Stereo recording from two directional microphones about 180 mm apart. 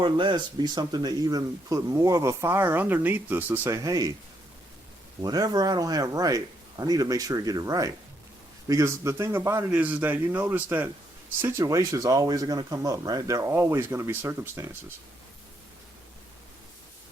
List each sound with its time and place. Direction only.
0.0 s speech: 25° right (ahead or behind)
5.2 s a man's voice: 20° right (ahead or behind)